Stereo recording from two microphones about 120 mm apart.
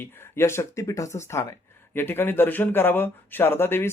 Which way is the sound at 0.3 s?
20° left (ahead or behind).